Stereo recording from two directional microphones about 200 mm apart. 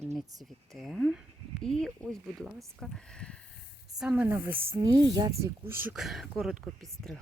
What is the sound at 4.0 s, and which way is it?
Speech, 5° right (ahead or behind).